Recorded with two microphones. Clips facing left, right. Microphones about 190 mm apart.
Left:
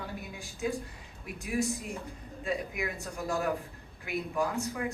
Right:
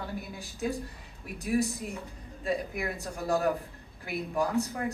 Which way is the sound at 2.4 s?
35° right (ahead or behind).